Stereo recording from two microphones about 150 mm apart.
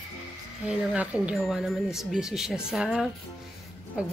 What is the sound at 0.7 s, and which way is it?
A woman's voice, 10° right (ahead or behind).